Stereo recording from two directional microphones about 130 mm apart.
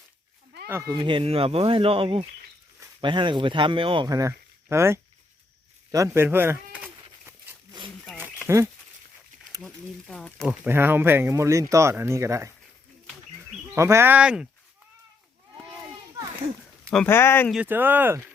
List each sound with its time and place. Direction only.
0.7 s speech: 25° right (ahead or behind)
0.9 s speech: 40° right (ahead or behind); by 4.9 s 20° right (ahead or behind)
5.9 s bleat: 25° right (ahead or behind)
8.2 s dog: 20° right (ahead or behind)
9.6 s speech: 5° left (ahead or behind)
10.7 s speech: 15° right (ahead or behind)
13.7 s speech: 20° right (ahead or behind)
17.1 s speech: 20° left (ahead or behind)
17.7 s speech: 15° right (ahead or behind)